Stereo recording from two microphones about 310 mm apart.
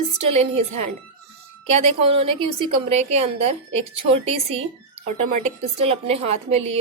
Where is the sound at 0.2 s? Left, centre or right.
Right.